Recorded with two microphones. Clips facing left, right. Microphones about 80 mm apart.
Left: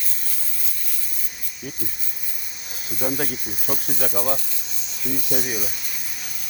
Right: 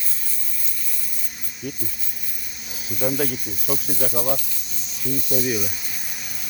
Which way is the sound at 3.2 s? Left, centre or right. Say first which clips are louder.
Right 3 dB; left.